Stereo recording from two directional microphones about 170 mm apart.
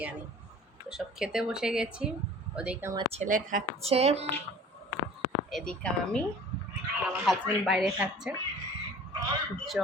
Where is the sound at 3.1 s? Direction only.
45° right (ahead or behind).